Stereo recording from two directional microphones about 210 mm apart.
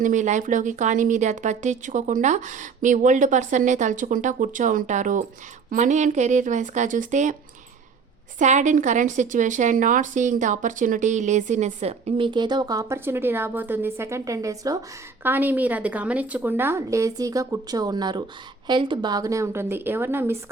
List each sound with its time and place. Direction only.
0.0 s speech: 35° right (ahead or behind)
8.4 s a woman's voice: 35° right (ahead or behind); by 20.4 s 10° right (ahead or behind)